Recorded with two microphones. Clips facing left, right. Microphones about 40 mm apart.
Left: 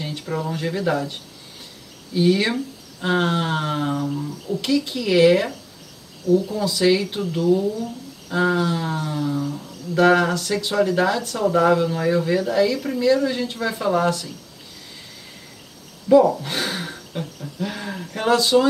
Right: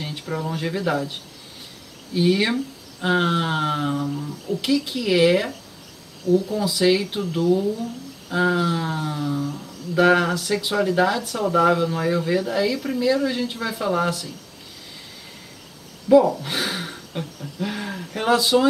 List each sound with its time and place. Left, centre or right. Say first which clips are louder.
0.0 s a sound: left 1 dB; centre
0.5 s speech: left 1 dB; centre
2.1 s speech: left 1 dB; centre
6.2 s speech: left 1 dB; left
6.5 s speech: left 1 dB; centre
16.4 s speech: even; centre